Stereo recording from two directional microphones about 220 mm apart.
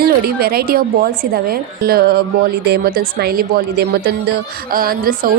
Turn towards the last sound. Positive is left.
turn(degrees=-40)  # may be behind; listen again after turning